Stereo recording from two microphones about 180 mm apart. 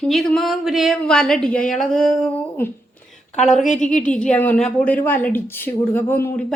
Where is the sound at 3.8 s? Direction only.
5° left (ahead or behind).